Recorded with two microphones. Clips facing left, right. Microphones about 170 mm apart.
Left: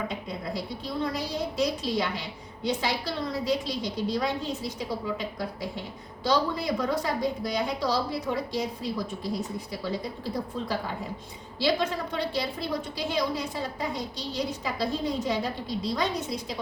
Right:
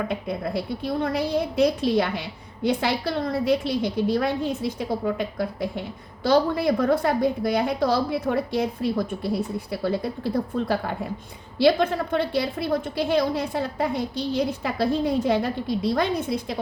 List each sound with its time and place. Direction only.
0.1 s a woman's voice: 60° right (ahead or behind)